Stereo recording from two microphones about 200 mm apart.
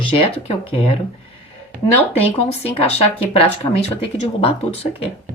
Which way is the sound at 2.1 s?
30° left (ahead or behind).